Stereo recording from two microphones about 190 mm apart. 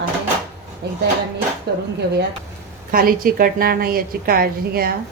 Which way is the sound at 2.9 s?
50° right (ahead or behind).